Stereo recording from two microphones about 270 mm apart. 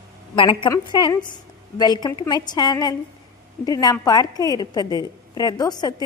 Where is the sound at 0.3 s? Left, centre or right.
Centre.